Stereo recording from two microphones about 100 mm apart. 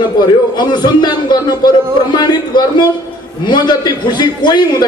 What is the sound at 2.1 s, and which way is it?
A man's voice, 45° left (ahead or behind).